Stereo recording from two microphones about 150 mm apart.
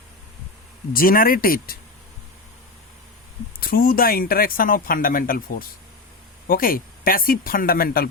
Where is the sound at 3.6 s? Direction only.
75° left (ahead or behind).